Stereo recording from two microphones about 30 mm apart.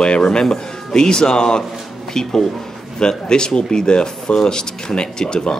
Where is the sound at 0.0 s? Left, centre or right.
Left.